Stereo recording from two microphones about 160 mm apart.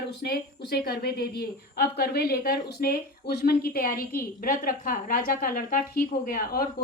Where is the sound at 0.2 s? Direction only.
80° left.